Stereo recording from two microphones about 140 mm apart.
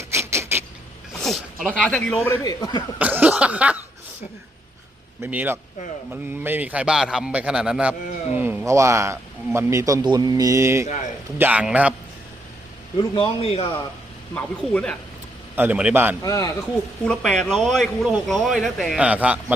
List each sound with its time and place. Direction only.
0.0 s a sound: 20° right (ahead or behind)
1.2 s speech: centre (ahead or behind)
2.2 s speech: 20° left (ahead or behind)
3.0 s a man's voice: 10° right (ahead or behind)
5.2 s a man's voice: 15° right (ahead or behind)
13.0 s a man's voice: 35° left (ahead or behind)
14.3 s speech: 10° left (ahead or behind)
15.5 s a man's voice: 10° right (ahead or behind)
16.2 s speech: 25° left (ahead or behind)
17.1 s a man's voice: 5° left (ahead or behind)